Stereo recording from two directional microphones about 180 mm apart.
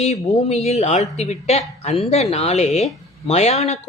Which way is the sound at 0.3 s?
35° left (ahead or behind).